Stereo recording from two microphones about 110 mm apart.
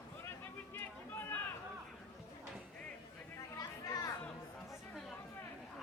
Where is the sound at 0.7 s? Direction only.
15° left (ahead or behind).